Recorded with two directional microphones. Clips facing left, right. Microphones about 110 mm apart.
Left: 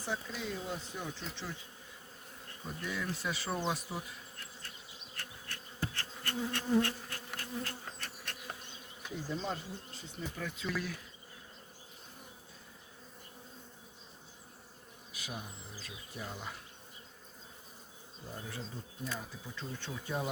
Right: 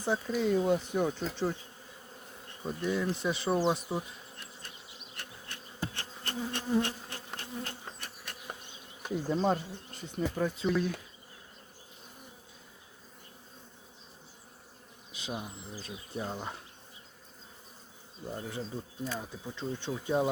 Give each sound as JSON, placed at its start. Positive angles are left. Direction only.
{"t": 0.3, "sound": "speech", "side_deg": -50}
{"t": 2.6, "sound": "bee", "side_deg": -25}
{"t": 9.0, "sound": "speech", "side_deg": -45}
{"t": 10.7, "sound": "speech", "side_deg": -20}
{"t": 15.1, "sound": "speech", "side_deg": -20}
{"t": 15.8, "sound": "speech", "side_deg": -30}
{"t": 18.3, "sound": "speech", "side_deg": -20}